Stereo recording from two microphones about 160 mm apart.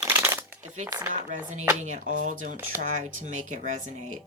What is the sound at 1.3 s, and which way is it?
A woman's voice, 50° right (ahead or behind).